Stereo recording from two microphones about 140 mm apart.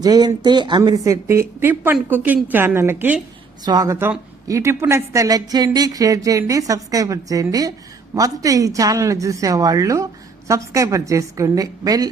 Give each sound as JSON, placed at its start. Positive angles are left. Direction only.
{"t": 0.0, "sound": "speech", "side_deg": -30}
{"t": 3.6, "sound": "a woman's voice", "side_deg": -30}